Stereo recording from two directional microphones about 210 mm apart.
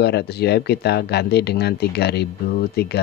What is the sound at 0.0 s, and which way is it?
Speech, 50° left (ahead or behind).